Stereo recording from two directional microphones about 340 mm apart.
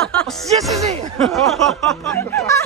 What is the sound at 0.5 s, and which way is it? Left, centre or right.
Speech, centre.